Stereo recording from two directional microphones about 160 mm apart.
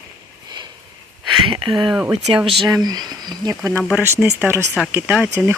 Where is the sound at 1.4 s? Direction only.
35° right (ahead or behind).